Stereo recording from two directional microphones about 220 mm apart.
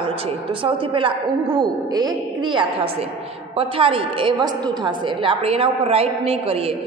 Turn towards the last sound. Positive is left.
turn(degrees=-25)  # may be behind; listen again after turning